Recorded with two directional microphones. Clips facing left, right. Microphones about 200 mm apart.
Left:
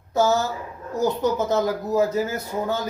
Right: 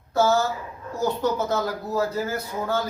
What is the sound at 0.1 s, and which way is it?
A woman's voice, 20° left (ahead or behind).